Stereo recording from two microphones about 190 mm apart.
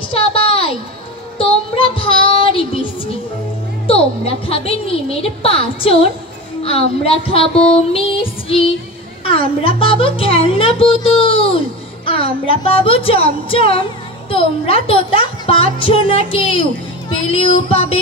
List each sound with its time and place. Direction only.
0.1 s a sound: 30° left (ahead or behind)
1.4 s child singing: 30° left (ahead or behind)
3.8 s a woman's voice: 30° left (ahead or behind)